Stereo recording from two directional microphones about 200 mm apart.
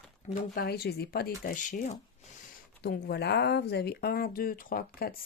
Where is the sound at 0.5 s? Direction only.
50° left (ahead or behind).